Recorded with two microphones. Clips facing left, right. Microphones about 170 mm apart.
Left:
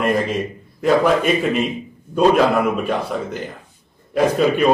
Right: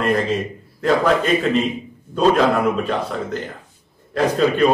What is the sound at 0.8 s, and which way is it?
Speech, 10° left (ahead or behind).